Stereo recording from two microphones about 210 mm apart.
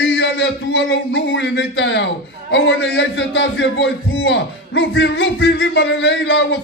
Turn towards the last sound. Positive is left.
turn(degrees=60)  # may be behind; listen again after turning